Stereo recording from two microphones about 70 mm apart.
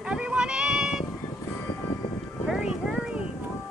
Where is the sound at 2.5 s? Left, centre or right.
Centre.